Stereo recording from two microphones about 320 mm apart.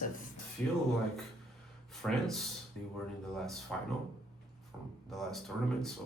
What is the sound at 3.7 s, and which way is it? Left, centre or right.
Speech, centre.